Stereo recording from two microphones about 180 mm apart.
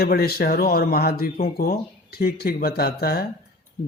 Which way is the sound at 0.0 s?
60° left (ahead or behind).